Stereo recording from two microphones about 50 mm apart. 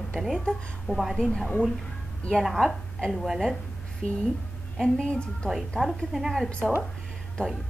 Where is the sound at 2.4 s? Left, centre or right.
Centre.